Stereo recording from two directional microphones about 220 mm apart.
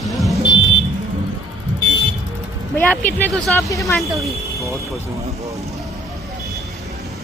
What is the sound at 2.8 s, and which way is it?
Speech, 5° left (ahead or behind).